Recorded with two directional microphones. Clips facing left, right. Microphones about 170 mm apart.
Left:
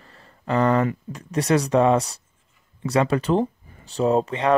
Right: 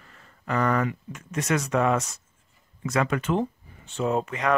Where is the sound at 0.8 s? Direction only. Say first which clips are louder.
Left 4 dB; 35° left (ahead or behind).